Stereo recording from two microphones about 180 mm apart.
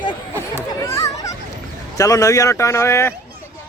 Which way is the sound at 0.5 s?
15° left (ahead or behind).